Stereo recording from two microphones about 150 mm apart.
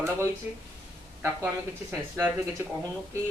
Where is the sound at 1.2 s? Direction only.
15° right (ahead or behind).